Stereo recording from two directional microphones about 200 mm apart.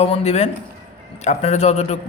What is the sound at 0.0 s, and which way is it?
A man's voice, 30° left (ahead or behind).